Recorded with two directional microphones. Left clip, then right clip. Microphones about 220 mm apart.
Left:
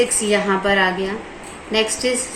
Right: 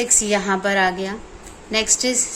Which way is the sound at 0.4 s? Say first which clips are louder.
Left 2 dB; 60° right (ahead or behind).